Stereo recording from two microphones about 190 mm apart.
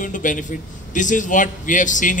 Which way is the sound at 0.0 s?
45° left (ahead or behind).